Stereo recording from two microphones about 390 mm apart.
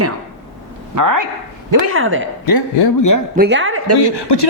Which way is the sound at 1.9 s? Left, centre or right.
Right.